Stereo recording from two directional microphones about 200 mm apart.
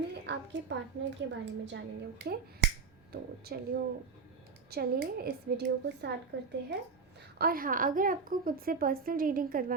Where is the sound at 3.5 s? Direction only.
50° right (ahead or behind).